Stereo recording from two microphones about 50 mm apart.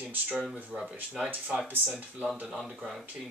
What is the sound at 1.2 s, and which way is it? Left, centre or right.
Speech, right.